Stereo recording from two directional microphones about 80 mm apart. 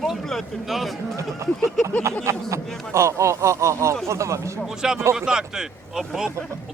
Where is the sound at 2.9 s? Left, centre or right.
Right.